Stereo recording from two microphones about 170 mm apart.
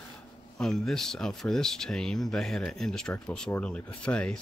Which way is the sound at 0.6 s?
Centre (ahead or behind).